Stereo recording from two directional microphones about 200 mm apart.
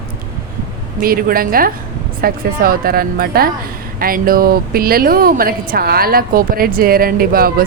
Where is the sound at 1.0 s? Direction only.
45° right (ahead or behind).